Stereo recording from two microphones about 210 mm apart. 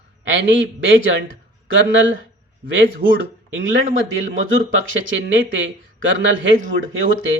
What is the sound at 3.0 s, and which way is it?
Speech, 45° right (ahead or behind).